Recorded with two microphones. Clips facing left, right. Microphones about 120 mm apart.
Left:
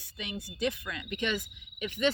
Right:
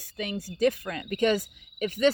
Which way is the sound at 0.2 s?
40° right (ahead or behind).